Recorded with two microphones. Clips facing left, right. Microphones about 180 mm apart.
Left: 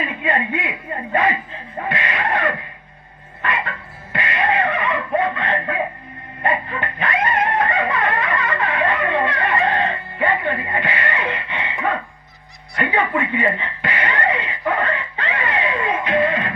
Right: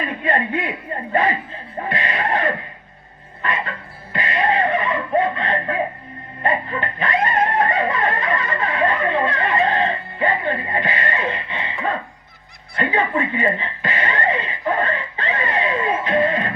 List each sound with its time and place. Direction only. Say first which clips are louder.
0.0 s speech: right 1 dB; 40° right (ahead or behind)
1.8 s music: even; 35° right (ahead or behind)
3.4 s a sound: even; 35° right (ahead or behind)
6.5 s music: even; 35° right (ahead or behind)
12.8 s speech: even; 35° right (ahead or behind)
15.4 s music: right 1 dB; 35° right (ahead or behind)